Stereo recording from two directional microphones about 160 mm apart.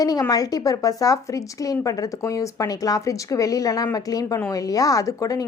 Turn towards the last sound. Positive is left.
turn(degrees=20)  # may be behind; listen again after turning